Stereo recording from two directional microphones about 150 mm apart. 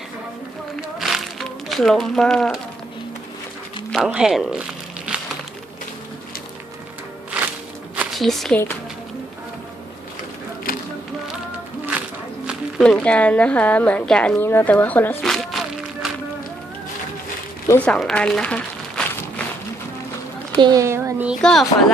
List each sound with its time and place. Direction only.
0.8 s speech: centre (ahead or behind)
3.9 s speech: 5° right (ahead or behind)
7.9 s a sound: centre (ahead or behind)
12.8 s a woman's voice: 5° left (ahead or behind)
15.2 s a sound: centre (ahead or behind)
17.7 s crumpling: 10° left (ahead or behind)
20.6 s speech: 25° right (ahead or behind)
21.4 s speech: centre (ahead or behind)